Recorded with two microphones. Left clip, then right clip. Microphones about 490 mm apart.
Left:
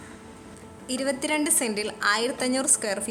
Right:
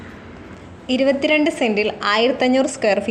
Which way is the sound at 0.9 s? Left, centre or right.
Left.